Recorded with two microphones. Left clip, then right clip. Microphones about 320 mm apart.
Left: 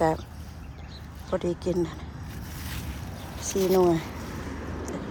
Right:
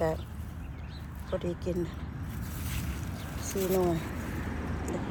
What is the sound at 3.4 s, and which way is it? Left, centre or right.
Speech, left.